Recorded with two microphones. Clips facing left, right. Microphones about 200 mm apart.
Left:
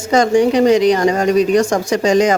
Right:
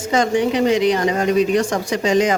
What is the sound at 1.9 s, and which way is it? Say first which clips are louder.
Speech: left 4 dB; 40° left (ahead or behind).